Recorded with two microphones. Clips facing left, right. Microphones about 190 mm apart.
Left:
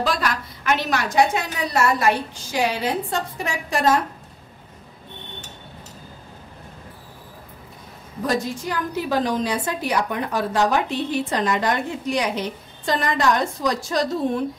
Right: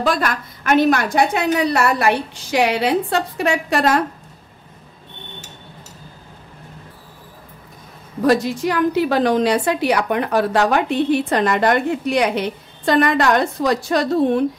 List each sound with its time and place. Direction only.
0.0 s a woman's voice: 50° right (ahead or behind); by 4.0 s 70° right (ahead or behind)
8.3 s a woman's voice: 70° right (ahead or behind)